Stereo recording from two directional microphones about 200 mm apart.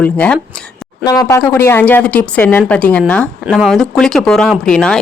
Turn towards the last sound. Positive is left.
turn(degrees=5)  # may be behind; listen again after turning